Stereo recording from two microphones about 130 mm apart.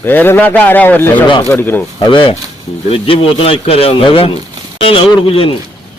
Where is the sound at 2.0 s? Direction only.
40° left (ahead or behind).